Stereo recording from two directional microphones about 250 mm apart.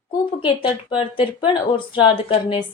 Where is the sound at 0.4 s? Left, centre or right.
Centre.